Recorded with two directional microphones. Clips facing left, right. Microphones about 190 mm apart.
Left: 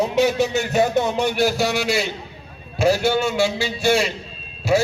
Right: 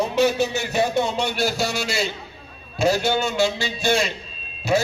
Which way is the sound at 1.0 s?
15° left (ahead or behind).